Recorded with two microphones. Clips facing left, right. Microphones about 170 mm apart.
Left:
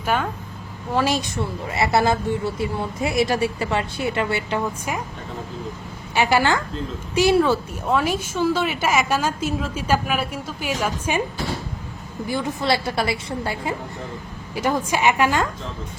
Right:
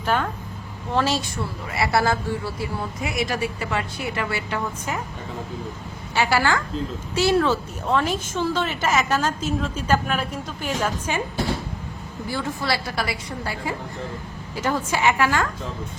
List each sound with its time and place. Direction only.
0.0 s a woman's voice: 10° left (ahead or behind)
6.1 s a woman's voice: 20° left (ahead or behind)
12.3 s a woman's voice: 20° left (ahead or behind)
14.5 s a woman's voice: 15° left (ahead or behind)